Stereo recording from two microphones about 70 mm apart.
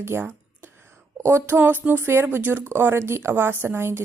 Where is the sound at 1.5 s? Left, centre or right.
Right.